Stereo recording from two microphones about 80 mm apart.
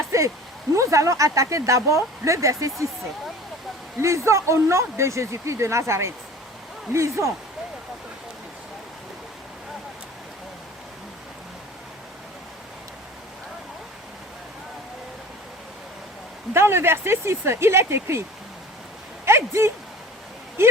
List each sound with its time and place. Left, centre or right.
0.1 s a sound: right
0.8 s speech: right
4.0 s speech: right
16.6 s speech: right
19.2 s speech: right